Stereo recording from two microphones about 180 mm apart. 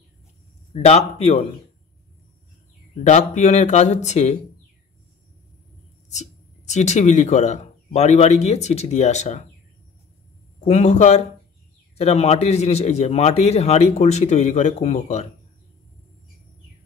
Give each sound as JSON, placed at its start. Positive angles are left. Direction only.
{"t": 0.7, "sound": "a man's voice", "side_deg": 35}
{"t": 3.0, "sound": "a man's voice", "side_deg": 40}
{"t": 6.1, "sound": "speech", "side_deg": 40}
{"t": 10.6, "sound": "a man's voice", "side_deg": 40}